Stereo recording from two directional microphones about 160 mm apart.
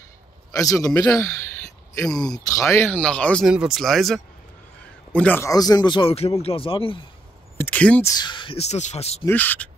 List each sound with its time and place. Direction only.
0.6 s speech: 20° left (ahead or behind)
2.0 s speech: 5° left (ahead or behind)
2.4 s speech: 20° left (ahead or behind)
3.4 s speech: 5° right (ahead or behind)
5.5 s speech: 25° left (ahead or behind)
7.5 s speech: 10° left (ahead or behind)
8.1 s speech: 30° left (ahead or behind)
9.2 s speech: 10° left (ahead or behind)